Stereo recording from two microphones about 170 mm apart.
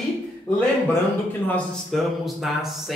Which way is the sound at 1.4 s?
5° left (ahead or behind).